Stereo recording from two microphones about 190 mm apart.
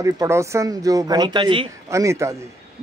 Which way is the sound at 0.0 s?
15° right (ahead or behind).